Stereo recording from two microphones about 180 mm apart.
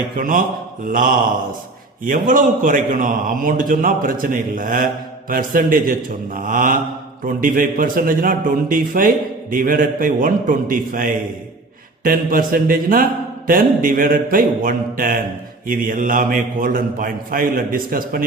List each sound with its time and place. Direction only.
0.2 s a man's voice: 50° right (ahead or behind)